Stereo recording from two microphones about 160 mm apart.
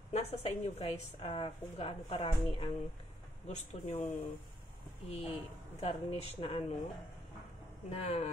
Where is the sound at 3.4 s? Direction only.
45° left (ahead or behind).